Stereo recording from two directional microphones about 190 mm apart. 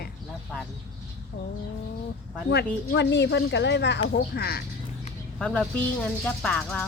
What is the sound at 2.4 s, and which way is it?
Speech, 60° left (ahead or behind).